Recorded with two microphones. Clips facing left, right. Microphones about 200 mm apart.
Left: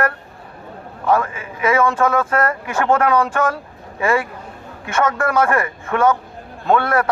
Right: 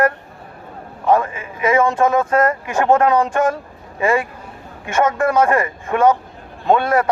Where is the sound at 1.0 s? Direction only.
20° right (ahead or behind).